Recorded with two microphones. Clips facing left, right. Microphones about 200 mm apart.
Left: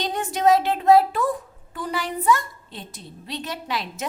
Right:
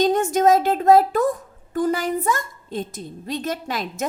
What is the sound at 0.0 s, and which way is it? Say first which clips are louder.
A child's voice: right 5 dB; 45° right (ahead or behind).